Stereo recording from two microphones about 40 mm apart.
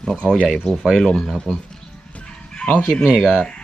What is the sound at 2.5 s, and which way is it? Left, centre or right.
Chicken, left.